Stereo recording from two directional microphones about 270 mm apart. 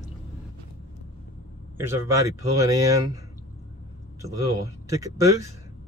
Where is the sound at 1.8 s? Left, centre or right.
Centre.